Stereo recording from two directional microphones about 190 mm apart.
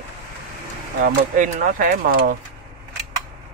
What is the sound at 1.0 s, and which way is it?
Speech, 45° right (ahead or behind).